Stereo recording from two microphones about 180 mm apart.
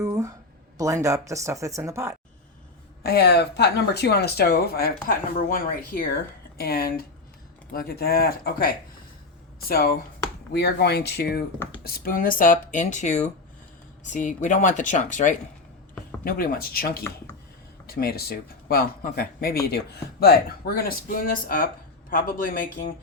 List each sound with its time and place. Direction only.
0.0 s a sound: 15° right (ahead or behind)
0.8 s speech: 15° right (ahead or behind)
3.0 s speech: 60° left (ahead or behind); by 15.4 s 45° left (ahead or behind)
16.2 s speech: 55° left (ahead or behind)